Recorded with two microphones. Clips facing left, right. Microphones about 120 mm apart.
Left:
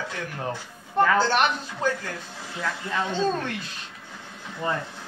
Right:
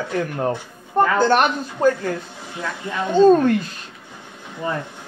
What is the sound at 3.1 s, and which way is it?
Speech, 50° right (ahead or behind).